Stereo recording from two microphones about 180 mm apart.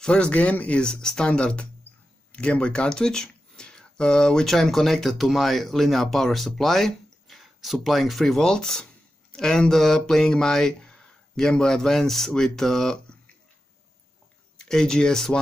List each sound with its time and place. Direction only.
0.0 s speech: 5° left (ahead or behind)
14.7 s speech: 5° left (ahead or behind)